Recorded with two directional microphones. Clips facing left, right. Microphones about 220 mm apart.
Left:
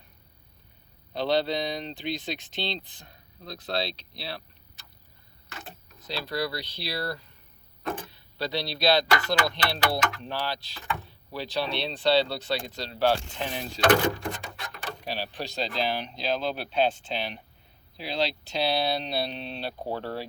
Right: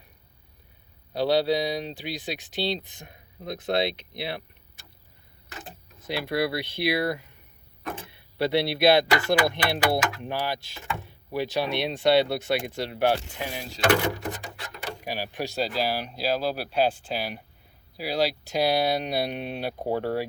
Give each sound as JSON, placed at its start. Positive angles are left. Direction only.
{"t": 1.1, "sound": "speech", "side_deg": -10}
{"t": 3.0, "sound": "speech", "side_deg": -20}
{"t": 6.1, "sound": "speech", "side_deg": -20}
{"t": 7.9, "sound": "vehicle", "side_deg": -25}
{"t": 8.5, "sound": "speech", "side_deg": -60}
{"t": 8.8, "sound": "speech", "side_deg": -20}